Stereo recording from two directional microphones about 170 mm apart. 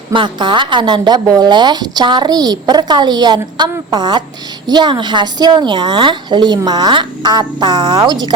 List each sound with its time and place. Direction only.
0.1 s speech: 30° right (ahead or behind)